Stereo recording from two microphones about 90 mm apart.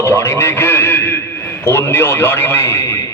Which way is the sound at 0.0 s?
30° left (ahead or behind).